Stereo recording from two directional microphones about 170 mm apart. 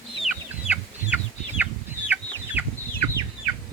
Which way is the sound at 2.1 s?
10° right (ahead or behind).